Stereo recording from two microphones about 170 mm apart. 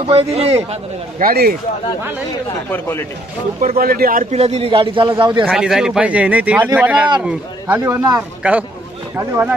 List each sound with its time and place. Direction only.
0.0 s speech: 35° right (ahead or behind)
1.2 s speech: 65° right (ahead or behind)
2.7 s a man's voice: 15° left (ahead or behind)
3.6 s speech: 60° right (ahead or behind)
4.3 s a man's voice: 40° right (ahead or behind)
5.5 s a man's voice: 5° right (ahead or behind)